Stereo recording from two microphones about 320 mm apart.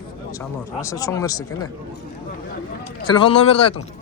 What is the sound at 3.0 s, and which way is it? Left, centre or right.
Speech, centre.